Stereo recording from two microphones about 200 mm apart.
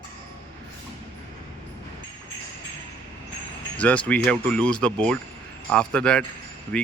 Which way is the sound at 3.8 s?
5° left (ahead or behind).